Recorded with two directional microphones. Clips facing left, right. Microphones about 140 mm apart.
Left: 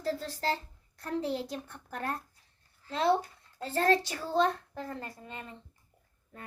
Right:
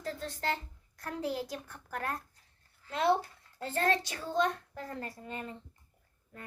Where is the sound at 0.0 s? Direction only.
35° left (ahead or behind).